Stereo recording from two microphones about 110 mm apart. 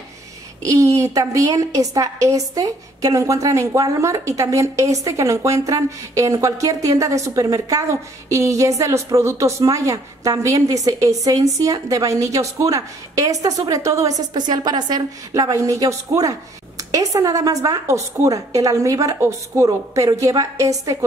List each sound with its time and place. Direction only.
0.6 s a woman's voice: 30° right (ahead or behind)